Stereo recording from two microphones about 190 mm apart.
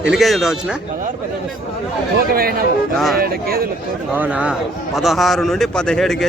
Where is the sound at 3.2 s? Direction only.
50° right (ahead or behind).